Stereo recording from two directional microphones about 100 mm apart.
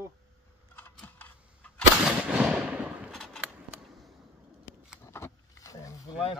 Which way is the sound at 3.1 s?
5° left (ahead or behind).